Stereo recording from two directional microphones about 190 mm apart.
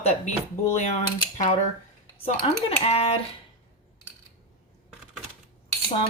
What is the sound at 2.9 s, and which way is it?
Speech, 30° left (ahead or behind).